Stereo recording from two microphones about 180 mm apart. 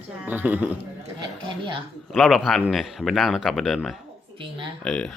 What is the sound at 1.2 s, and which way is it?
Speech, 25° right (ahead or behind).